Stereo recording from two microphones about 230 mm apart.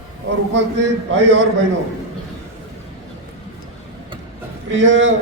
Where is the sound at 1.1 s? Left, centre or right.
Right.